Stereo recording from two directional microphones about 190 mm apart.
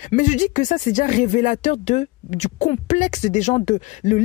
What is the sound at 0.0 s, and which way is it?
Speech, 40° left (ahead or behind).